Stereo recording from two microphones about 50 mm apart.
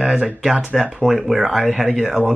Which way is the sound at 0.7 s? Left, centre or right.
Centre.